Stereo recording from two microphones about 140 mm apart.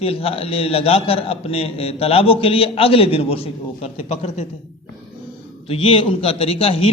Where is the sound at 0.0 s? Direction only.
45° left (ahead or behind).